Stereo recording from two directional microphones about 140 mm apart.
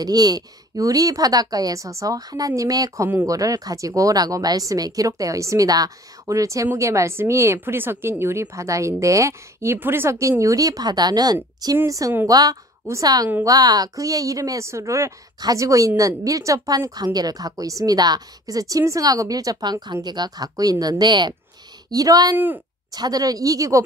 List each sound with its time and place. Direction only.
0.0 s a woman's voice: 30° right (ahead or behind)